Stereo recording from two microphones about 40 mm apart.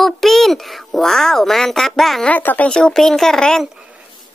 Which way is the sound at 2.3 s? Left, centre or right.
Left.